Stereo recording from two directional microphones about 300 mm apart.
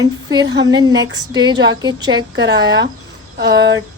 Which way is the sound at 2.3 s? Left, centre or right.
Right.